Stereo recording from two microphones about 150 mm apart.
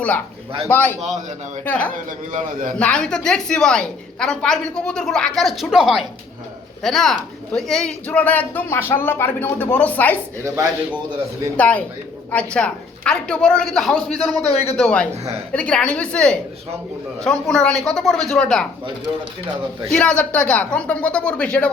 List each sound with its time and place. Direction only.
0.7 s speech: 15° left (ahead or behind)
2.3 s a man's voice: 60° right (ahead or behind)
2.7 s a woman's voice: 5° left (ahead or behind)
10.4 s speech: 20° right (ahead or behind)
11.5 s a woman's voice: 10° left (ahead or behind)
14.5 s a man's voice: 45° left (ahead or behind)
14.8 s a woman's voice: 5° left (ahead or behind)
15.1 s a woman's voice: 45° right (ahead or behind)
15.5 s a woman's voice: 10° left (ahead or behind)
19.9 s speech: 5° left (ahead or behind)